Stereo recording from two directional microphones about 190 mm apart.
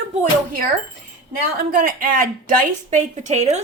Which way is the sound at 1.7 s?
50° right (ahead or behind).